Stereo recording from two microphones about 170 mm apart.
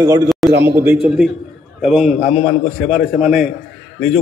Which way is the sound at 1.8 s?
5° right (ahead or behind).